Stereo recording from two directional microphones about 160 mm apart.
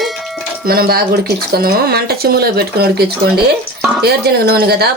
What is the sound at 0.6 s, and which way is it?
Speech, 70° right (ahead or behind).